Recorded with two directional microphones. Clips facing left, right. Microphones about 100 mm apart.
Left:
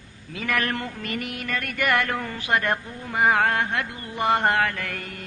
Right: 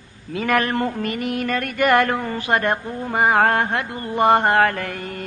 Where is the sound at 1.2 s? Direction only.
40° right (ahead or behind).